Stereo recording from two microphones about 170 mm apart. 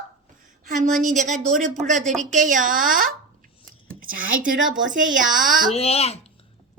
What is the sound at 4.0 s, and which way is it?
Speech, 55° right (ahead or behind).